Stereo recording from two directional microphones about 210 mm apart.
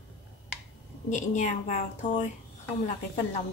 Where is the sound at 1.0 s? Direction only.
35° left (ahead or behind).